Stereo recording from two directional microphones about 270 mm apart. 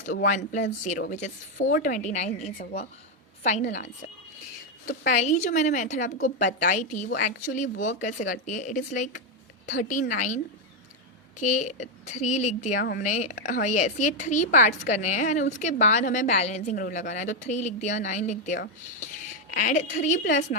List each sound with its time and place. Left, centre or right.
0.1 s a woman's voice: left
3.7 s a woman's voice: left
20.1 s a woman's voice: left